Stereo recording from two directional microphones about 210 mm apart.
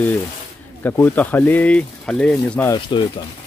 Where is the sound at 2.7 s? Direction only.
20° left (ahead or behind).